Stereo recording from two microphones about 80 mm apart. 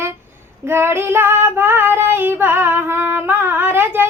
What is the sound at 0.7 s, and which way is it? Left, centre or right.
Child singing, right.